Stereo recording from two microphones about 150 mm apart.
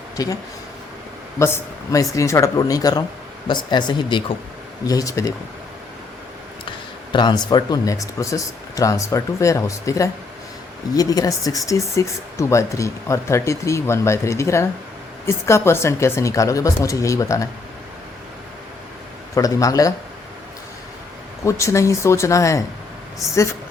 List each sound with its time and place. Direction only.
1.4 s speech: 15° left (ahead or behind)
6.7 s speech: 30° left (ahead or behind)
19.3 s speech: 20° left (ahead or behind)
21.4 s speech: 20° left (ahead or behind)